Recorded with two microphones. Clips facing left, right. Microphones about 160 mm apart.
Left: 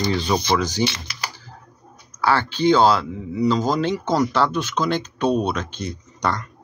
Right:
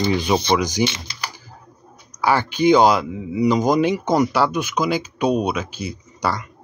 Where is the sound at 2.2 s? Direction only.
15° right (ahead or behind).